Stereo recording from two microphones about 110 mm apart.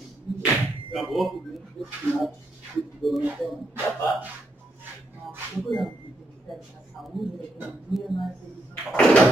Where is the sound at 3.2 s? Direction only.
15° right (ahead or behind).